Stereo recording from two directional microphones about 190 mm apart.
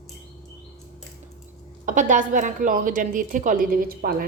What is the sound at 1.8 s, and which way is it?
A woman's voice, 40° right (ahead or behind).